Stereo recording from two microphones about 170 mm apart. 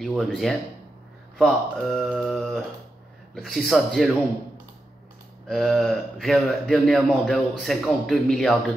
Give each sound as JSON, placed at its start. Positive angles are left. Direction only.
{"t": 0.0, "sound": "a man's voice", "side_deg": 0}
{"t": 5.5, "sound": "a man's voice", "side_deg": 0}